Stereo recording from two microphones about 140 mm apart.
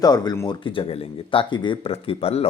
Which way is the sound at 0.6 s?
40° left (ahead or behind).